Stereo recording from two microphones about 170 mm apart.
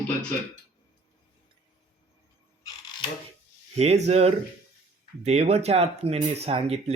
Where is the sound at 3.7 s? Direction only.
40° right (ahead or behind).